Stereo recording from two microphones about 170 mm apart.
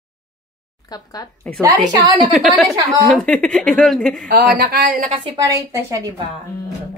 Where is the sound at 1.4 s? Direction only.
5° left (ahead or behind).